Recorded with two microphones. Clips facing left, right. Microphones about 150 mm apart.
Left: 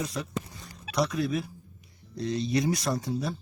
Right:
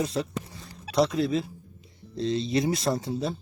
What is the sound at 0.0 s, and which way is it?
Speech, 25° right (ahead or behind).